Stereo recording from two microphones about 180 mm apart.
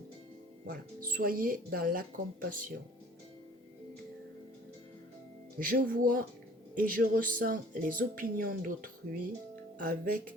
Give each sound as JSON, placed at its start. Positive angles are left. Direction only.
{"t": 0.7, "sound": "speech", "side_deg": -50}
{"t": 5.5, "sound": "speech", "side_deg": -50}